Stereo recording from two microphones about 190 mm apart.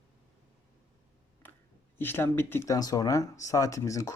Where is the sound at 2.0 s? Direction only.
10° left (ahead or behind).